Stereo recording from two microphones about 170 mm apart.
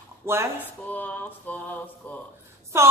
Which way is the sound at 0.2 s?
15° right (ahead or behind).